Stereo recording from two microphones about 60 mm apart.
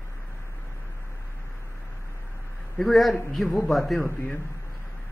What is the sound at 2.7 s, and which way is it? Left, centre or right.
Speech, centre.